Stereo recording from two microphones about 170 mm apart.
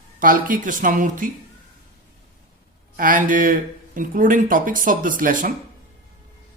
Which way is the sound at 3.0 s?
55° right (ahead or behind).